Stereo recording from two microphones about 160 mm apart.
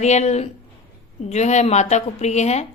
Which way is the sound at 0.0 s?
45° left (ahead or behind).